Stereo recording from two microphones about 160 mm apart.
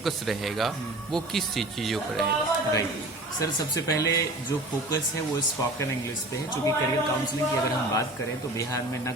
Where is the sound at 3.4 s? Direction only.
20° left (ahead or behind).